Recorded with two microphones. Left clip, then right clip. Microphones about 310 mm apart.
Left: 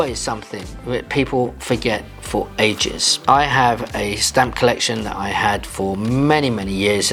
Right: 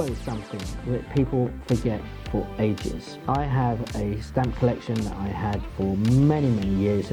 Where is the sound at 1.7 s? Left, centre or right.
Centre.